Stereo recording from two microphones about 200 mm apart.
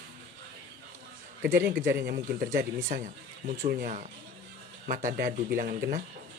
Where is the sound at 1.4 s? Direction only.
50° right (ahead or behind).